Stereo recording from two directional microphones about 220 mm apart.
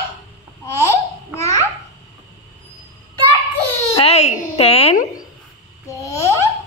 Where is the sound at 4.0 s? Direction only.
30° left (ahead or behind).